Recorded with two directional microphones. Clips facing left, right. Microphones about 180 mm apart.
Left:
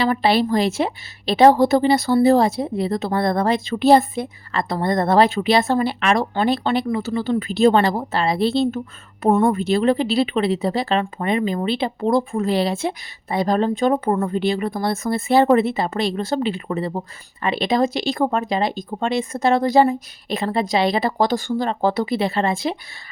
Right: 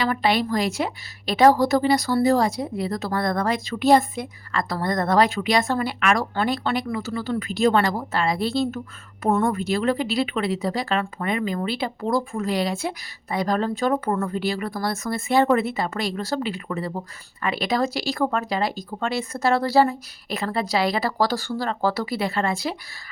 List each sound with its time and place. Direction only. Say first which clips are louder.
0.0 s a woman's voice: left 4 dB; 30° left (ahead or behind)